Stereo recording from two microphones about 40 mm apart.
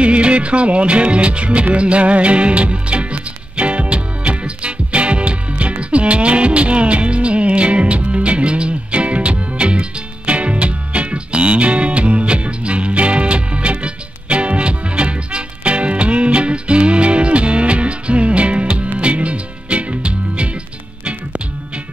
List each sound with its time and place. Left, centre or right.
0.0 s music: right